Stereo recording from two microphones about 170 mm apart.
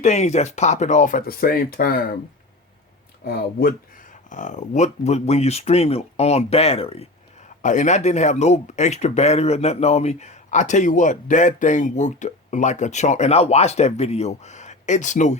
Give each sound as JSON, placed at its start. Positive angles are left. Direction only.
{"t": 0.0, "sound": "speech", "side_deg": 40}
{"t": 3.2, "sound": "speech", "side_deg": 60}
{"t": 4.3, "sound": "speech", "side_deg": 45}
{"t": 7.6, "sound": "speech", "side_deg": 45}